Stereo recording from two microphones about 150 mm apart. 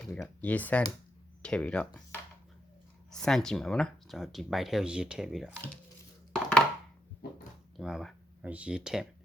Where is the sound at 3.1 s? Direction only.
5° left (ahead or behind).